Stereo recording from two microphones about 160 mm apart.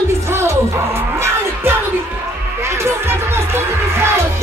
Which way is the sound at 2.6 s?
15° right (ahead or behind).